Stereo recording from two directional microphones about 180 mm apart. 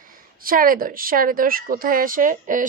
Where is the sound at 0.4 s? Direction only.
50° right (ahead or behind).